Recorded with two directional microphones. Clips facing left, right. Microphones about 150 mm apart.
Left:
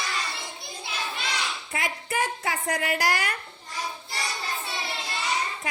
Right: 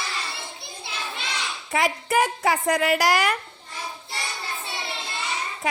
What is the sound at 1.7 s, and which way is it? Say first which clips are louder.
A woman's voice: right 10 dB; 90° right.